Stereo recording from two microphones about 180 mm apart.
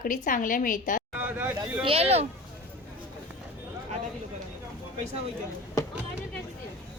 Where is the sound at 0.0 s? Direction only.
45° left (ahead or behind).